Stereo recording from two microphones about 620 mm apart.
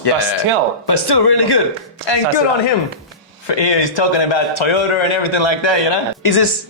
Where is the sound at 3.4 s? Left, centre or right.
Left.